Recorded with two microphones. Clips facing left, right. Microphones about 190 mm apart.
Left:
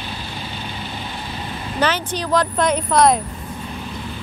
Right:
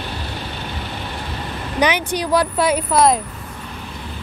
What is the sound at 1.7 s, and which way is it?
Speech, 15° right (ahead or behind).